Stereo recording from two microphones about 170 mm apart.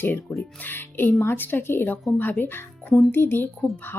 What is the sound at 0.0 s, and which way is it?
Speech, 10° left (ahead or behind).